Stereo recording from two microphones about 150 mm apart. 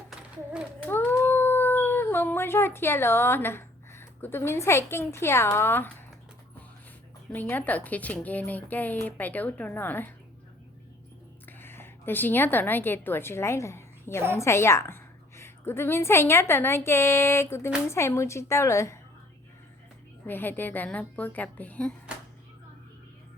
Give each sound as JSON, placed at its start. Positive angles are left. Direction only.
{"t": 0.9, "sound": "a sound", "side_deg": 15}
{"t": 4.9, "sound": "speech", "side_deg": 15}
{"t": 7.3, "sound": "speech", "side_deg": 10}
{"t": 11.4, "sound": "a woman's voice", "side_deg": 15}
{"t": 20.2, "sound": "speech", "side_deg": 15}